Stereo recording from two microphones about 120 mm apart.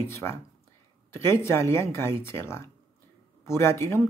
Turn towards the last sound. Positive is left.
turn(degrees=20)  # may be behind; listen again after turning